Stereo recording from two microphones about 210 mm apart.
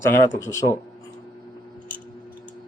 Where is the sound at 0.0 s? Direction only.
10° left (ahead or behind).